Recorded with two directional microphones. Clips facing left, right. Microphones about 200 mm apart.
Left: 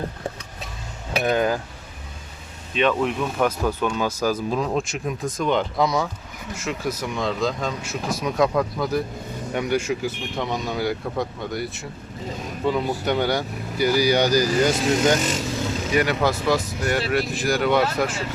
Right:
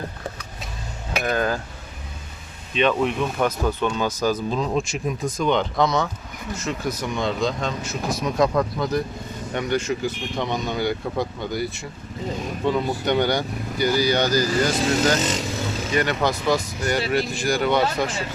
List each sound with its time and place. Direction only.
1.2 s speech: 15° left (ahead or behind)
2.7 s speech: 5° left (ahead or behind); by 15.2 s 20° left (ahead or behind)
15.2 s speech: 20° right (ahead or behind)
15.9 s speech: 5° left (ahead or behind)